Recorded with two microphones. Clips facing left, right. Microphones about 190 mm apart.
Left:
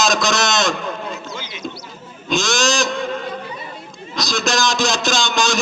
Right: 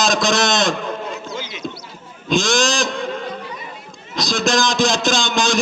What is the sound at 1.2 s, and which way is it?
Horse, 50° right (ahead or behind).